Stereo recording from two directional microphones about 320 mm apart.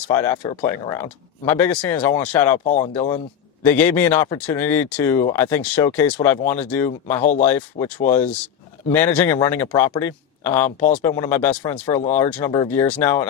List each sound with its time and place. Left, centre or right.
0.1 s speech: centre
7.2 s speech: left
7.4 s speech: centre
10.7 s speech: left